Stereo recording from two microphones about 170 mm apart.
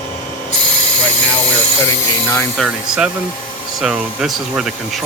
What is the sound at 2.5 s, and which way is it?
Speech, 5° right (ahead or behind).